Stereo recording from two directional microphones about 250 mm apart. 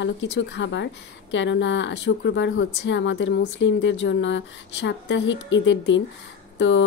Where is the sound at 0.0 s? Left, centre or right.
Left.